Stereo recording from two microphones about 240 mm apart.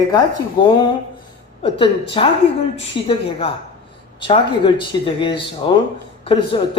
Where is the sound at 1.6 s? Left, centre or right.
Left.